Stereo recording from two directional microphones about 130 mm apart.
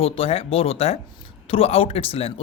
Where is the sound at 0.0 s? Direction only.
50° left (ahead or behind).